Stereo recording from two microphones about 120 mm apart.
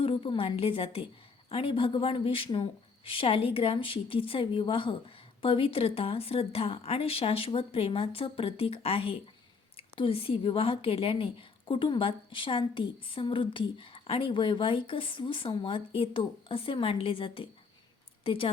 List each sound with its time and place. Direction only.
0.0 s a woman's voice: 50° left (ahead or behind)